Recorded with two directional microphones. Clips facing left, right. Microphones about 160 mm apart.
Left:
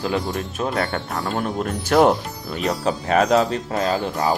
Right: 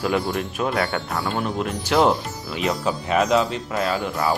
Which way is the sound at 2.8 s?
40° left (ahead or behind).